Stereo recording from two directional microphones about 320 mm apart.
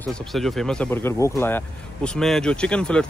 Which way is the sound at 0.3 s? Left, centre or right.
Centre.